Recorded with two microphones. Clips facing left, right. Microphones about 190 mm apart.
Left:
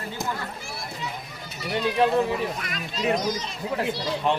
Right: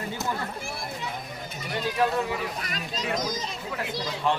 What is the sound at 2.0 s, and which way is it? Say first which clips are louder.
Speech: left 4 dB; 30° left (ahead or behind).